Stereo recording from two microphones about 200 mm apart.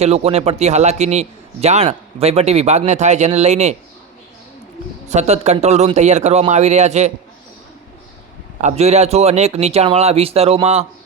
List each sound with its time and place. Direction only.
0.0 s a man's voice: 30° right (ahead or behind)
5.0 s a man's voice: 35° right (ahead or behind)
8.6 s a man's voice: 35° right (ahead or behind)